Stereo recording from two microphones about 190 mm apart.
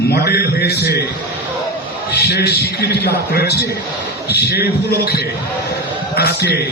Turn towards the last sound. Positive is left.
turn(degrees=55)  # may be behind; listen again after turning